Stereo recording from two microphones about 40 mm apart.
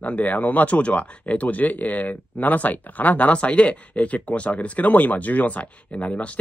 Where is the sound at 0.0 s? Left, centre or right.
Left.